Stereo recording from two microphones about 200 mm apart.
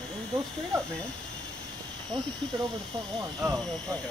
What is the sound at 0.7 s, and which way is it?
Speech, 15° right (ahead or behind).